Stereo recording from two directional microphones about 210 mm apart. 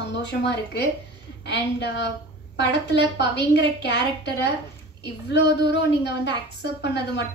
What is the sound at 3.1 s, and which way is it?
Speech, 55° left (ahead or behind).